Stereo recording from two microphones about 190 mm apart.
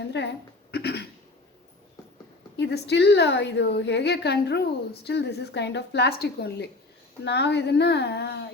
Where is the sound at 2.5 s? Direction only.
65° left (ahead or behind).